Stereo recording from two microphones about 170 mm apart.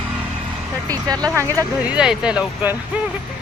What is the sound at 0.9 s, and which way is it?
Speech, 20° right (ahead or behind).